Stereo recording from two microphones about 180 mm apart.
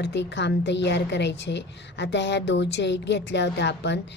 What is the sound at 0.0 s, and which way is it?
A woman's voice, 75° left (ahead or behind).